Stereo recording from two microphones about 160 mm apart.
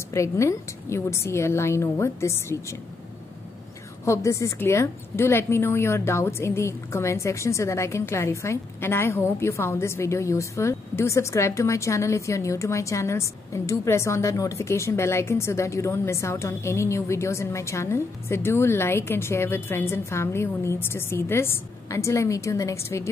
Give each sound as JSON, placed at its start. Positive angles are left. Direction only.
{"t": 0.1, "sound": "a woman's voice", "side_deg": 20}
{"t": 4.0, "sound": "a woman's voice", "side_deg": 20}